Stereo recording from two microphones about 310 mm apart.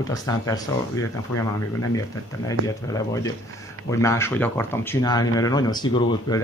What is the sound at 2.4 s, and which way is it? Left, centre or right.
Speech, centre.